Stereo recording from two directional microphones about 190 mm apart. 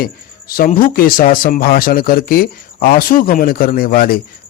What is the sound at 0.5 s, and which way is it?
Speech, 50° left (ahead or behind).